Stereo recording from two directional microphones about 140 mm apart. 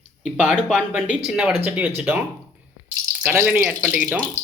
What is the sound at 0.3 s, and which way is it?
Speech, 10° right (ahead or behind).